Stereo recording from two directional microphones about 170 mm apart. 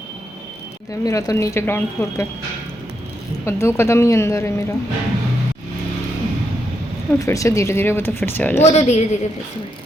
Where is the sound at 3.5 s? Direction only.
15° left (ahead or behind).